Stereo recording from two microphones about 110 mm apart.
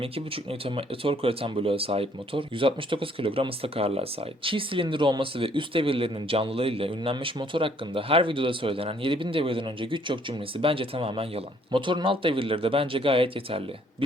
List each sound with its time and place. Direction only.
0.0 s speech: 55° right (ahead or behind)